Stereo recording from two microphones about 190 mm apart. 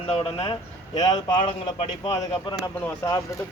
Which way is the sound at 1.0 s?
20° left (ahead or behind).